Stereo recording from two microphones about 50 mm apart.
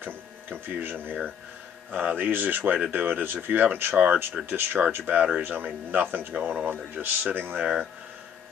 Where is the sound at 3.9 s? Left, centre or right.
Right.